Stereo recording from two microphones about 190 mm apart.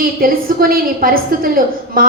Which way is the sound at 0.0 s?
50° right (ahead or behind).